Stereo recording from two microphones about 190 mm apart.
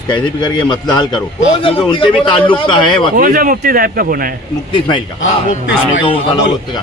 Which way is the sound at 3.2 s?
45° right (ahead or behind).